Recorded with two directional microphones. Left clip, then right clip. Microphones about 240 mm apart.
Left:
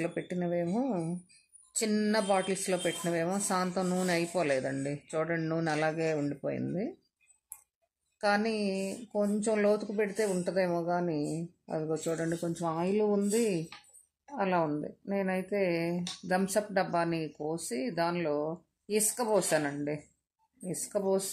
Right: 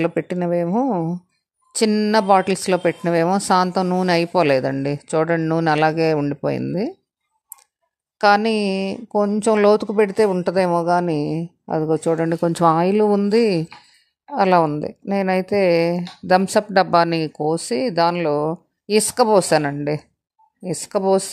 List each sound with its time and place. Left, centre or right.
0.0 s speech: right
8.2 s speech: right